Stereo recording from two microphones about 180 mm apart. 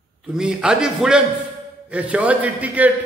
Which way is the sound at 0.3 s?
5° right (ahead or behind).